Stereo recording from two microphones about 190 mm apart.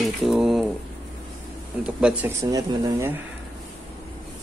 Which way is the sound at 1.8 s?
5° right (ahead or behind).